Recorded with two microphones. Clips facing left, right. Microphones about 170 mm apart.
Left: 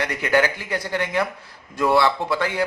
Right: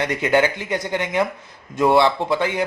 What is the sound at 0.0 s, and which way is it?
A man's voice, 20° right (ahead or behind).